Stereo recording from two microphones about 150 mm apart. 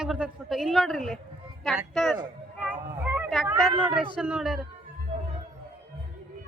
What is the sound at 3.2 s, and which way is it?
Speech, centre (ahead or behind).